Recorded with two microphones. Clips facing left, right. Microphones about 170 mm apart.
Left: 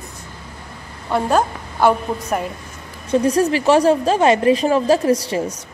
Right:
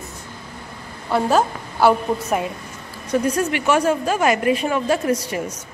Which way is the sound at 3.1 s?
30° left (ahead or behind).